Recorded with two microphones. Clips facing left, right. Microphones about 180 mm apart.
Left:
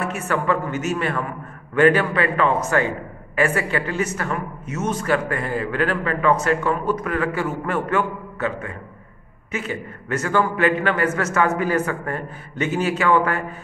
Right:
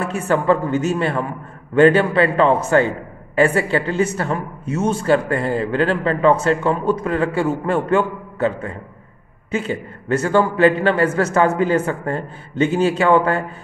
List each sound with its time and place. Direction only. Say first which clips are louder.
0.0 s a man's voice: right 4 dB; 30° right (ahead or behind)